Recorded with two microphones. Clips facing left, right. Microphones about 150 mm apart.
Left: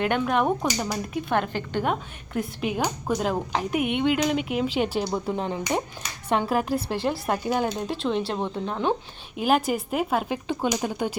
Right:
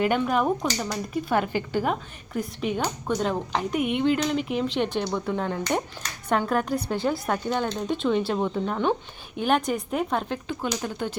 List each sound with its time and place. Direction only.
0.0 s speech: 5° right (ahead or behind)
0.6 s speech: 10° left (ahead or behind)
5.3 s speech: 20° left (ahead or behind)
5.6 s speech: 5° left (ahead or behind)